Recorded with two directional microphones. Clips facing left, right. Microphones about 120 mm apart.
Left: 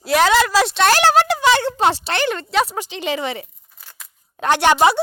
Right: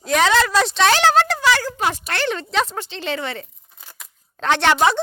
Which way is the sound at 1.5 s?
25° left (ahead or behind).